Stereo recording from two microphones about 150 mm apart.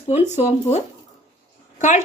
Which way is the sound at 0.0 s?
45° left (ahead or behind).